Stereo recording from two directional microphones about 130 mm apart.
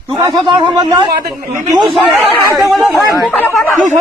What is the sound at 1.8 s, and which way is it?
A man's voice, centre (ahead or behind).